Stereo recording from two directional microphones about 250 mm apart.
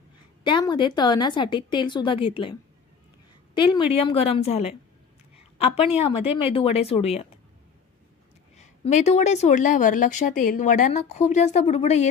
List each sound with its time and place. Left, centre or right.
0.4 s a woman's voice: centre
3.5 s speech: centre
5.9 s speech: left
8.5 s speech: left